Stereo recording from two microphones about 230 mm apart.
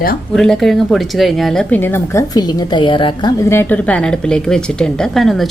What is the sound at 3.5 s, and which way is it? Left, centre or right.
A woman's voice, centre.